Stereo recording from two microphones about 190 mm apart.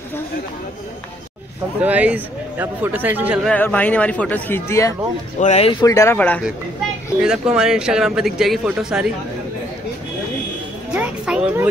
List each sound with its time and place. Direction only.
1.8 s speech: 10° right (ahead or behind)
3.4 s a man's voice: 10° left (ahead or behind)
5.4 s a man's voice: 35° left (ahead or behind); by 6.4 s 10° left (ahead or behind)
7.2 s speech: 5° right (ahead or behind)
10.9 s music: 5° right (ahead or behind)